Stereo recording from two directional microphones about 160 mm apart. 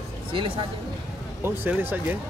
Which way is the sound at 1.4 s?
15° right (ahead or behind).